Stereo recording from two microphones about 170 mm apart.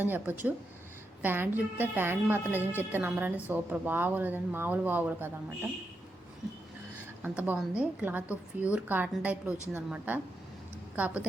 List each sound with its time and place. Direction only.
0.0 s a woman's voice: 10° right (ahead or behind)
7.2 s a woman's voice: 10° right (ahead or behind)